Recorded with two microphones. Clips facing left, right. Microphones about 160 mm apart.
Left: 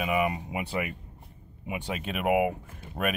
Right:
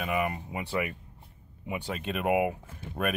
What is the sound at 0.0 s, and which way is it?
Speech, 15° left (ahead or behind).